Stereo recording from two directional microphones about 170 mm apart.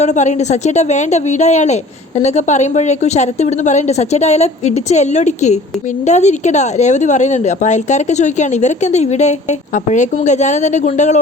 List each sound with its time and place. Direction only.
0.0 s a woman's voice: 45° left (ahead or behind)